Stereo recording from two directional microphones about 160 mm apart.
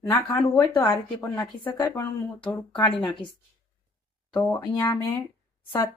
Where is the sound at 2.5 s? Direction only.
25° left (ahead or behind).